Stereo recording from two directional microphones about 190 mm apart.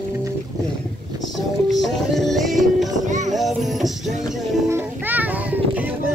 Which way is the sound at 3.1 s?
40° right (ahead or behind).